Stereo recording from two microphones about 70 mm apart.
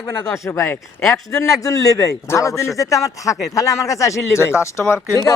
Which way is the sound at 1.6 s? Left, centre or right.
Left.